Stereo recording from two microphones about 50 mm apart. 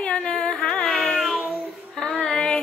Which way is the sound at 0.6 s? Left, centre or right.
Centre.